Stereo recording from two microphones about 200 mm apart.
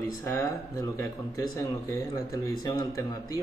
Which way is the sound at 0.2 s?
15° left (ahead or behind).